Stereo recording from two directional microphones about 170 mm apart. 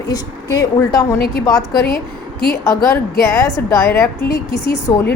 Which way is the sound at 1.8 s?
65° left (ahead or behind).